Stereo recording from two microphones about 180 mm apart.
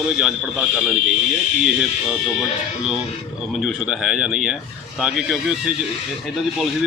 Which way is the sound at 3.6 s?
5° right (ahead or behind).